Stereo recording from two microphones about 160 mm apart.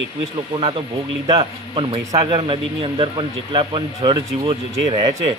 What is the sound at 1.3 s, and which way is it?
A man's voice, 30° right (ahead or behind).